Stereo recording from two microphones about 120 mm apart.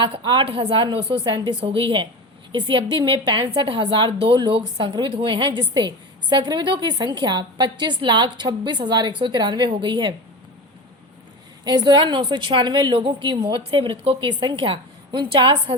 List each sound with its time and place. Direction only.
0.0 s a woman's voice: 40° right (ahead or behind)
11.6 s a woman's voice: 35° right (ahead or behind)